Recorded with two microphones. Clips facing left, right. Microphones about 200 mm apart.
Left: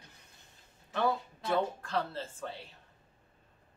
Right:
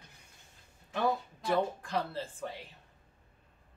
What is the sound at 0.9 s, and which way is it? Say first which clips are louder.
Speech: even; 15° right (ahead or behind).